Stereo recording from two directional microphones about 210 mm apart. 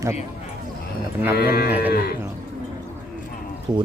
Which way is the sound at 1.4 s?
45° left (ahead or behind).